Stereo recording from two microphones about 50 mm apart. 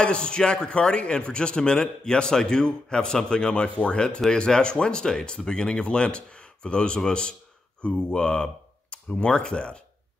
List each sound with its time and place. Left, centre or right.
0.0 s a man's voice: centre